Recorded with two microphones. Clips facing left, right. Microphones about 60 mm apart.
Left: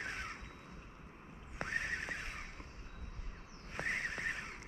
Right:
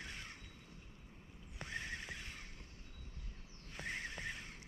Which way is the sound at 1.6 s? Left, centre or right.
Left.